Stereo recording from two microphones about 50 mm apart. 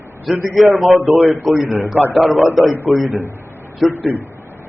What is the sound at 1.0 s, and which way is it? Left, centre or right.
Speech, right.